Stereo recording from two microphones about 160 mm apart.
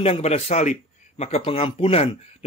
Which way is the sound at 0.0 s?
40° left (ahead or behind).